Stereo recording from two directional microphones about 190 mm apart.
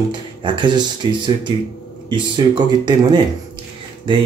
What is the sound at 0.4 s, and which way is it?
Speech, 25° right (ahead or behind).